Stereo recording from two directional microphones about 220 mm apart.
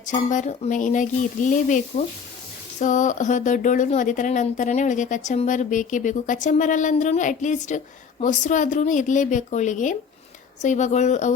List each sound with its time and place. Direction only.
0.0 s speech: 35° left (ahead or behind)